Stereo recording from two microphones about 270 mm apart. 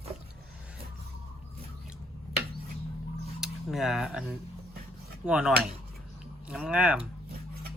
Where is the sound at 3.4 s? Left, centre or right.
Centre.